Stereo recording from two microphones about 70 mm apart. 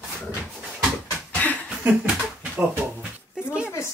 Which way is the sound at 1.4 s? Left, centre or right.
Left.